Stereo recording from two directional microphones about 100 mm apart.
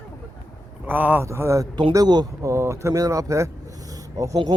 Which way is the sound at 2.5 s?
30° right (ahead or behind).